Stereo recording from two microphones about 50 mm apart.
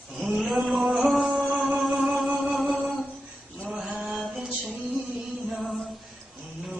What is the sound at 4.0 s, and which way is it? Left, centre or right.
Mantra, centre.